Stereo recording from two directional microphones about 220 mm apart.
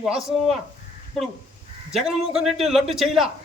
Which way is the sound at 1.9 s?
Centre (ahead or behind).